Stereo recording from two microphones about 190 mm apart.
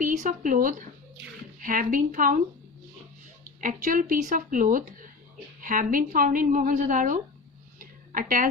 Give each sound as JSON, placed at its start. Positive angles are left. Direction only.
{"t": 0.0, "sound": "a woman's voice", "side_deg": -40}
{"t": 3.4, "sound": "a woman's voice", "side_deg": -45}